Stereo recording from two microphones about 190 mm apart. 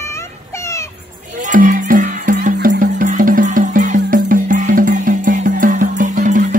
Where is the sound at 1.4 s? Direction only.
45° right (ahead or behind).